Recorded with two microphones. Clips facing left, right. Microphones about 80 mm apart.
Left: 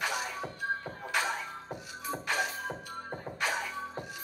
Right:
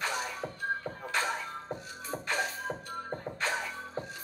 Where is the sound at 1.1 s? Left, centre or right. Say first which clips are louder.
Even; centre.